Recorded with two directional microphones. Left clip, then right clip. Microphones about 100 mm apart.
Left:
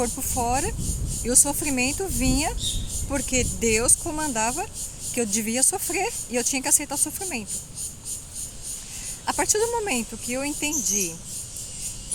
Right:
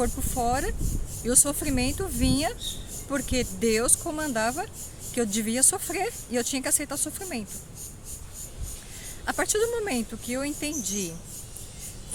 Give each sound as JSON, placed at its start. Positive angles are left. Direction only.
{"t": 0.0, "sound": "speech", "side_deg": -15}
{"t": 9.2, "sound": "speech", "side_deg": -15}